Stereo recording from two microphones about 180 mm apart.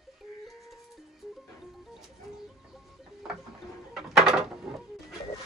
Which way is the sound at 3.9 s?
Centre (ahead or behind).